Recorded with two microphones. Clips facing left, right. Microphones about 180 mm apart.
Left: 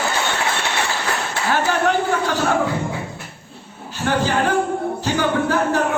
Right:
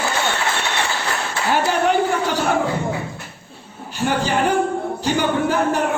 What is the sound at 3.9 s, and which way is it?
A man's voice, 15° right (ahead or behind).